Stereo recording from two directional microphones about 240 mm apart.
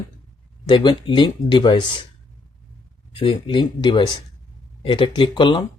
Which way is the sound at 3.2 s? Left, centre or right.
Left.